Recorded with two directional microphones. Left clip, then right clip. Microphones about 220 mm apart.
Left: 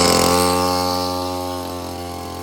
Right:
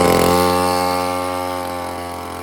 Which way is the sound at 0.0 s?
35° right (ahead or behind).